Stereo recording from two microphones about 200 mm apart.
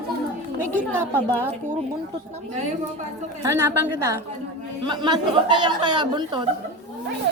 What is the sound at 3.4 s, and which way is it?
A woman's voice, 15° right (ahead or behind).